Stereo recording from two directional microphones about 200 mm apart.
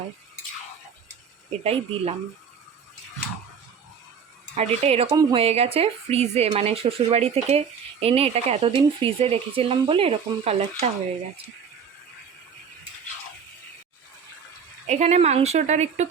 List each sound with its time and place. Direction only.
1.6 s speech: 30° right (ahead or behind)
4.5 s speech: 35° right (ahead or behind)
14.8 s speech: 35° right (ahead or behind)